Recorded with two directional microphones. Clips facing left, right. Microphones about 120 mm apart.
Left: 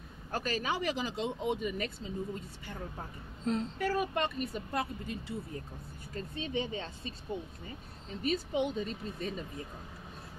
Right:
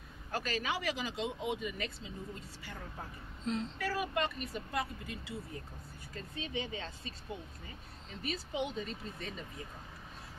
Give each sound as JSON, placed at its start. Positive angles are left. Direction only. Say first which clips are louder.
{"t": 0.3, "sound": "speech", "louder": "left 2 dB", "side_deg": 40}
{"t": 3.4, "sound": "speech", "louder": "left 4 dB", "side_deg": 40}
{"t": 6.3, "sound": "speech", "louder": "left 4 dB", "side_deg": 30}